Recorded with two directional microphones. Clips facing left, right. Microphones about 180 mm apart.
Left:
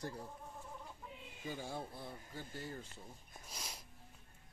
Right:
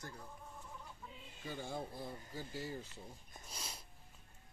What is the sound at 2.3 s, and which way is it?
Speech, 5° right (ahead or behind).